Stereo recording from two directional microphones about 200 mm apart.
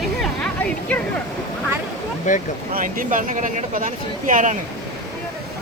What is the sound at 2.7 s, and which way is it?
Speech, 40° right (ahead or behind).